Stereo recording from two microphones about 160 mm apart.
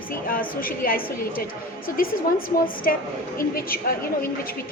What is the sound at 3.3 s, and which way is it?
Speech, 65° left (ahead or behind).